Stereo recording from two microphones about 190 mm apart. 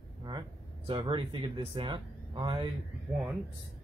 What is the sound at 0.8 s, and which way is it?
Speech, 25° right (ahead or behind).